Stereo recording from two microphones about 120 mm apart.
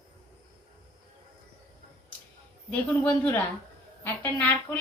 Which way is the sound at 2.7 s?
10° left (ahead or behind).